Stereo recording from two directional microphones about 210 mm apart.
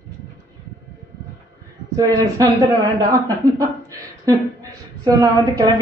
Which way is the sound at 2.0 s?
15° right (ahead or behind).